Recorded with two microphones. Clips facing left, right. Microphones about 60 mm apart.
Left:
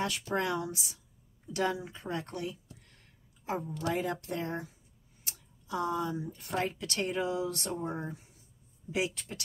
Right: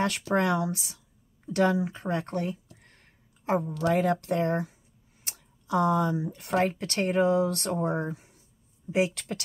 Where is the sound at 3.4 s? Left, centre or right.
Right.